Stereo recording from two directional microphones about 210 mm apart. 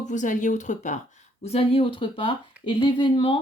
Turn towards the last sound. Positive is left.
turn(degrees=25)  # may be behind; listen again after turning